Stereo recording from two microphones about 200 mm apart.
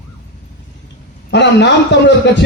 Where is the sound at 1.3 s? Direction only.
60° left (ahead or behind).